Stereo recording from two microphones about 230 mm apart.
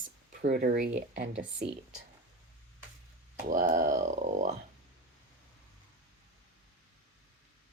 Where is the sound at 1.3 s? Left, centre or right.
Right.